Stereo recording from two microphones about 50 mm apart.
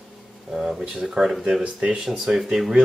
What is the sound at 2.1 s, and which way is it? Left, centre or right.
Speech, centre.